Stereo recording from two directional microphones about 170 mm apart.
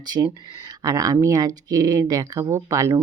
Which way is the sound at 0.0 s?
25° right (ahead or behind).